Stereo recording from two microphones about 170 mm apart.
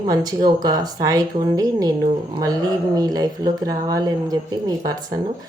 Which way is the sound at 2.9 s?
20° right (ahead or behind).